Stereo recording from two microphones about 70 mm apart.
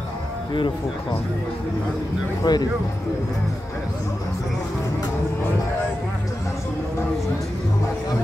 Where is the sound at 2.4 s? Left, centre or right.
Left.